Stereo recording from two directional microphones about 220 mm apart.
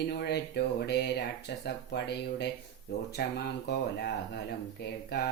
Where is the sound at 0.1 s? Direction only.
50° left (ahead or behind).